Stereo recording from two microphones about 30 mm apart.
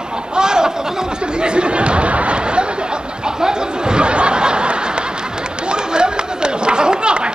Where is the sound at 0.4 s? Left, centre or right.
Right.